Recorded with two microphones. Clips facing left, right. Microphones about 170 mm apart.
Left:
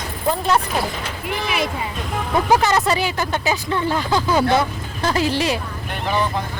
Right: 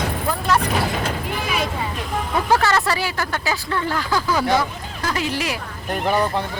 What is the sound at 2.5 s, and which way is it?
Speech, 15° left (ahead or behind).